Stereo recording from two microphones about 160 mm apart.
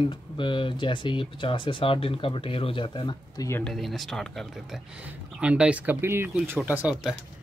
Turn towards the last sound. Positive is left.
turn(degrees=-10)  # may be behind; listen again after turning